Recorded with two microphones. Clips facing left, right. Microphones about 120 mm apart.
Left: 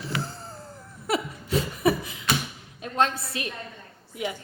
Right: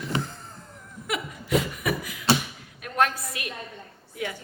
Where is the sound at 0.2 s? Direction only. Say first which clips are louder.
Even; 35° left (ahead or behind).